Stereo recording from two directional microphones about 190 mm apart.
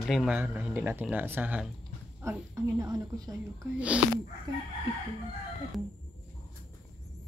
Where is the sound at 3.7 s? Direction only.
5° right (ahead or behind).